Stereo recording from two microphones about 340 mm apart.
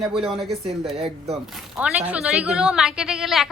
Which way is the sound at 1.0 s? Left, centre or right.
Centre.